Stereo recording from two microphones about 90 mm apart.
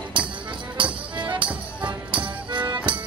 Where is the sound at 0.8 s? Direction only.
60° right (ahead or behind).